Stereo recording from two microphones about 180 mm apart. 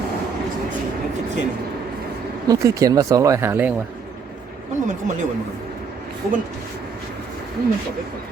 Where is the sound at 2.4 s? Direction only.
20° right (ahead or behind).